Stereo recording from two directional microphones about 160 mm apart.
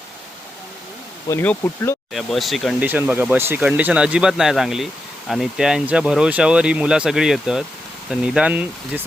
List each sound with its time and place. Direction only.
1.3 s speech: 15° left (ahead or behind)
2.1 s speech: centre (ahead or behind)
2.8 s speech: 10° right (ahead or behind)